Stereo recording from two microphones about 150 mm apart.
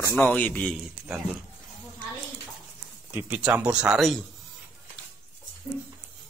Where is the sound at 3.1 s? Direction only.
10° right (ahead or behind).